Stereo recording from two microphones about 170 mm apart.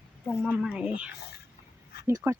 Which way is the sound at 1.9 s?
70° left (ahead or behind).